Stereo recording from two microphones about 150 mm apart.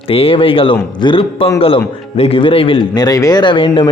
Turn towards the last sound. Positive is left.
turn(degrees=35)  # may be behind; listen again after turning